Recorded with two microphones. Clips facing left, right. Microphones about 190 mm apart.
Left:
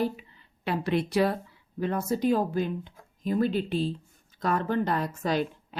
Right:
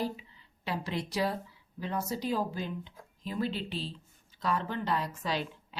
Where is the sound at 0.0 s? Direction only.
55° left (ahead or behind).